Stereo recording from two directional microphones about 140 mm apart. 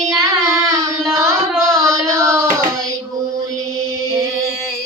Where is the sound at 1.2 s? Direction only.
25° right (ahead or behind).